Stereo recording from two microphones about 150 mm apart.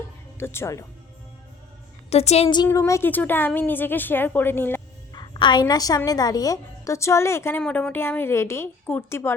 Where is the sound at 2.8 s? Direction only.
15° left (ahead or behind).